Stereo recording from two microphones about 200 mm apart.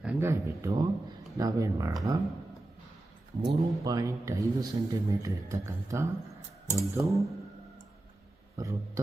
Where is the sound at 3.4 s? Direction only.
20° right (ahead or behind).